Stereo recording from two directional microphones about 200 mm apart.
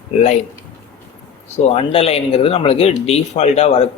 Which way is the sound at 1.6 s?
30° left (ahead or behind).